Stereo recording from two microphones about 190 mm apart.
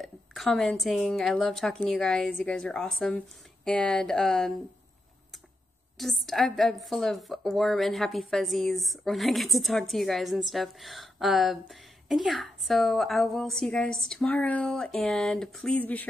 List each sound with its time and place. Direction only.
0.0 s a woman's voice: centre (ahead or behind)
5.9 s a woman's voice: centre (ahead or behind)